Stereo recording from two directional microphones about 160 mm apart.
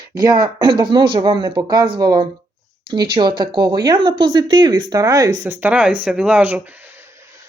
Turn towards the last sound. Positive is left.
turn(degrees=-10)  # may be behind; listen again after turning